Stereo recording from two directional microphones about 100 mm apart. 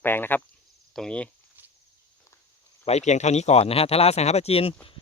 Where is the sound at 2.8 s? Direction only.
90° left.